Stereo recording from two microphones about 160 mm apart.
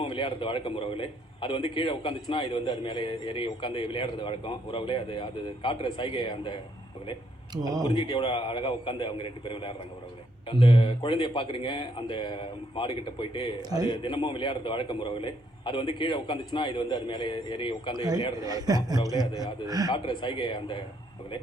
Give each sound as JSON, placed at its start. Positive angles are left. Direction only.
{"t": 0.0, "sound": "a man's voice", "side_deg": 35}
{"t": 7.5, "sound": "a man's voice", "side_deg": -20}
{"t": 7.9, "sound": "a man's voice", "side_deg": 30}
{"t": 13.6, "sound": "a man's voice", "side_deg": -25}
{"t": 13.9, "sound": "a man's voice", "side_deg": 35}
{"t": 18.4, "sound": "a man's voice", "side_deg": -25}
{"t": 19.9, "sound": "a man's voice", "side_deg": 30}